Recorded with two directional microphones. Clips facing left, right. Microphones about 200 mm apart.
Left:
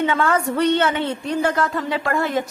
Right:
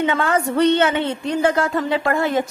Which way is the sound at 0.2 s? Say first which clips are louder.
Right 2 dB; 25° right (ahead or behind).